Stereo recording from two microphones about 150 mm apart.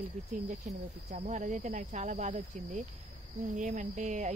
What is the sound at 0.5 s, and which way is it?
Speech, 55° right (ahead or behind).